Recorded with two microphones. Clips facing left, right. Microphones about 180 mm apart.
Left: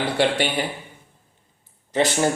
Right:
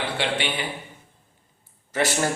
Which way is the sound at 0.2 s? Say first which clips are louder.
Left 8 dB; 40° left (ahead or behind).